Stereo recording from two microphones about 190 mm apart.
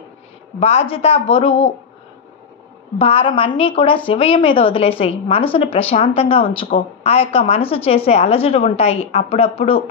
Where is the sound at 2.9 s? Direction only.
30° left (ahead or behind).